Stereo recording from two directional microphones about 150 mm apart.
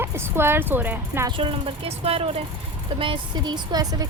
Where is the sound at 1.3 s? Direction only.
40° right (ahead or behind).